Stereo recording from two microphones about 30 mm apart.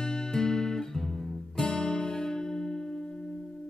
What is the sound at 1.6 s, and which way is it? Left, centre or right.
Music, left.